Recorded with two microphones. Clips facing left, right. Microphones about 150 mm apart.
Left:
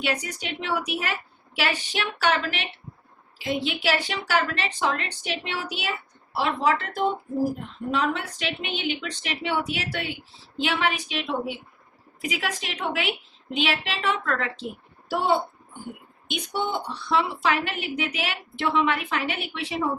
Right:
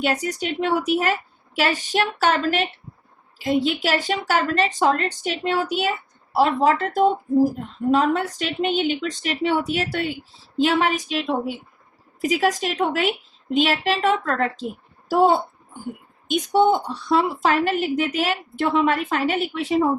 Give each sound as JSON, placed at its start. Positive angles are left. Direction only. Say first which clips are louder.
{"t": 0.0, "sound": "a woman's voice", "louder": "right 6 dB", "side_deg": -40}